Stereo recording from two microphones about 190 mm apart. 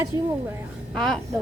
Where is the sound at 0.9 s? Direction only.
5° left (ahead or behind).